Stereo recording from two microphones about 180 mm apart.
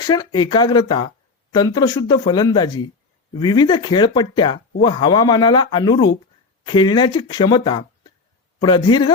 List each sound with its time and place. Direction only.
0.0 s speech: 25° left (ahead or behind)